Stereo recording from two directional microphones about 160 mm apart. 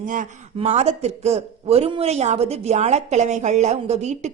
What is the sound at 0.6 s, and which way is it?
A man's voice, 45° right (ahead or behind).